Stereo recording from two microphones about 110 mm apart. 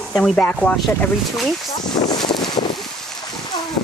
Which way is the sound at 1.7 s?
40° left (ahead or behind).